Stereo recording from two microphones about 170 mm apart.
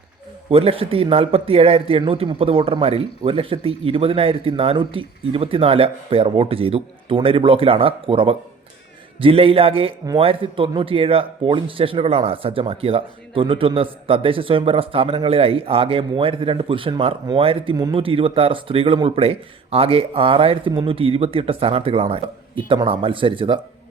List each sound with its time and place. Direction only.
0.5 s speech: 35° right (ahead or behind)